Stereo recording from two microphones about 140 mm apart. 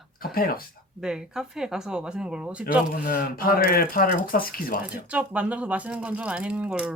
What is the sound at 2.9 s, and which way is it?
Speech, 85° left.